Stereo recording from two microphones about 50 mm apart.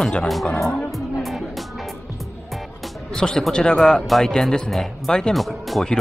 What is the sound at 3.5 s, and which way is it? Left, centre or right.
Speech, centre.